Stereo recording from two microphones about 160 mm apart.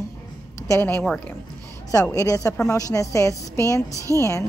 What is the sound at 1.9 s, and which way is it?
A woman's voice, 20° left (ahead or behind).